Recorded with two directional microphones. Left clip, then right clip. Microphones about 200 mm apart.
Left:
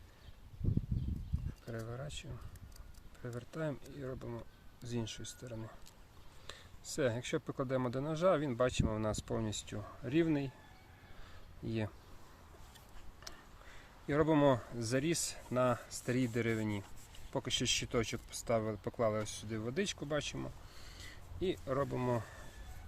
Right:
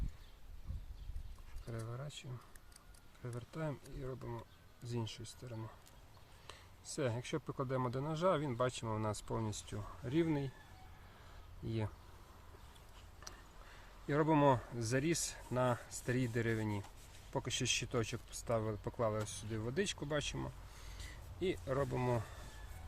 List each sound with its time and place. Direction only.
1.6 s speech: 30° left (ahead or behind)
3.2 s speech: 30° left (ahead or behind)
14.1 s speech: 15° left (ahead or behind)